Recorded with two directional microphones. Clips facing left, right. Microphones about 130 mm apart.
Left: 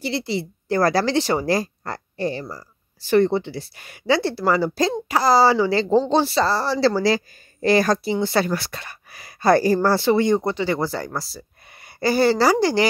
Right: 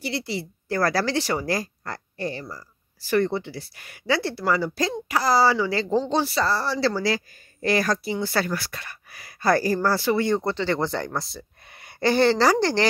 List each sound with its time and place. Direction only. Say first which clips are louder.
0.0 s speech: left 4 dB; 25° left (ahead or behind); by 12.8 s 10° left (ahead or behind)